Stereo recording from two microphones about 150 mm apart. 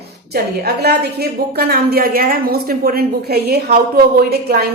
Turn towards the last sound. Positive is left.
turn(degrees=-90)